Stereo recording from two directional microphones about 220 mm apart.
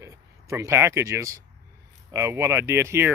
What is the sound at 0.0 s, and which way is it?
Speech, 15° right (ahead or behind).